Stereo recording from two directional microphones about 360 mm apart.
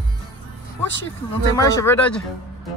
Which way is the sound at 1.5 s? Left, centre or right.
Centre.